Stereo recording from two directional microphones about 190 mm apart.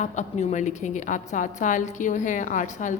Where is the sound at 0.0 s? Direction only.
40° left (ahead or behind).